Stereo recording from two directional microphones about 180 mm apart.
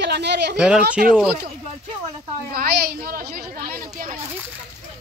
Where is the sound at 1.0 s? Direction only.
55° right (ahead or behind).